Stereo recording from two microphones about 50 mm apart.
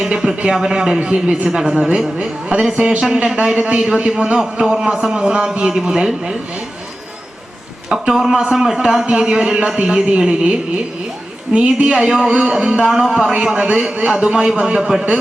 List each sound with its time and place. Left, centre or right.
0.2 s a man's voice: centre
7.9 s a man's voice: centre
13.3 s a man's voice: centre
14.8 s a man's voice: centre